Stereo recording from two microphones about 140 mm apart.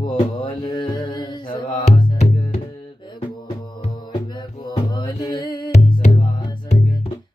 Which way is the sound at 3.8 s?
35° left (ahead or behind).